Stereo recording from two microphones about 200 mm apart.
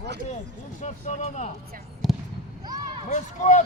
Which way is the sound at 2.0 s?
Centre (ahead or behind).